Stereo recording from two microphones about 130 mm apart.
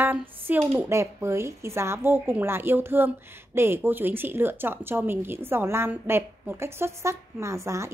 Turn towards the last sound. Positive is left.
turn(degrees=-20)  # may be behind; listen again after turning